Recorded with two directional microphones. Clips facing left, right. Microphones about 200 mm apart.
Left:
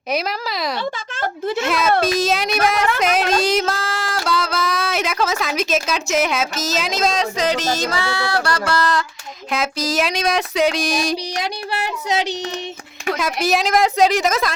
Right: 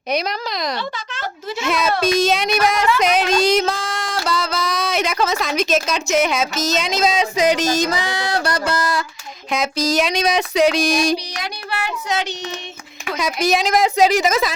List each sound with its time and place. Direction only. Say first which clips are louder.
0.1 s child singing: even; 5° left (ahead or behind)
0.8 s speech: left 3 dB; 50° left (ahead or behind)
1.6 s child singing: right 1 dB; centre (ahead or behind)
9.5 s child singing: right 2 dB; centre (ahead or behind)
13.1 s child singing: right 2 dB; centre (ahead or behind)